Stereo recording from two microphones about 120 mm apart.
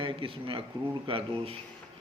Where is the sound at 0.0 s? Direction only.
45° right (ahead or behind).